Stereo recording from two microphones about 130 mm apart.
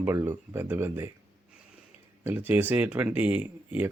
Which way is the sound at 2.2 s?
15° right (ahead or behind).